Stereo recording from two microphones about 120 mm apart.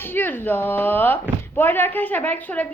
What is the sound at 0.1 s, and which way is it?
A woman's voice, 15° left (ahead or behind).